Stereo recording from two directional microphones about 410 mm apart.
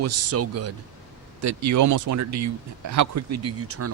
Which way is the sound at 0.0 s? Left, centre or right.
Right.